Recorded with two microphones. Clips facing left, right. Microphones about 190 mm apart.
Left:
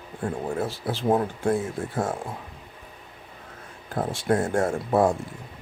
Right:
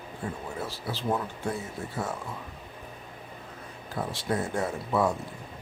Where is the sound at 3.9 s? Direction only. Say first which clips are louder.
Left 6 dB; 50° left (ahead or behind).